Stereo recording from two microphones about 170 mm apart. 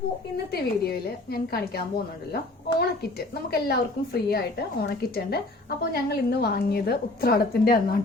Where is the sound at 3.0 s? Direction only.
70° left (ahead or behind).